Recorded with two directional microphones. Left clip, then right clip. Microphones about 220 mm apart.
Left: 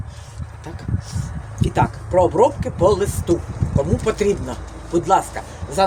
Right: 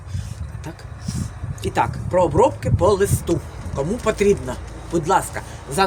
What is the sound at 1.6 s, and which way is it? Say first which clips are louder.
Speech: left 1 dB; 25° right (ahead or behind).